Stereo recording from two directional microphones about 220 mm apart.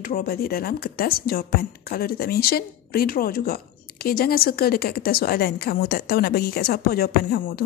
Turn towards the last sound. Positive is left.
turn(degrees=45)  # may be behind; listen again after turning